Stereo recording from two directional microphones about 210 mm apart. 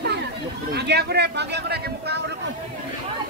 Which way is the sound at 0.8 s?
50° right (ahead or behind).